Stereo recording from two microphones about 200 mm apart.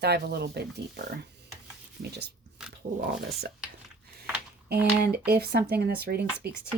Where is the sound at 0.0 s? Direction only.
55° right (ahead or behind).